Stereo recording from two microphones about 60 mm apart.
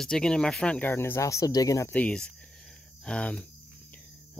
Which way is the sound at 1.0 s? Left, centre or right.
Left.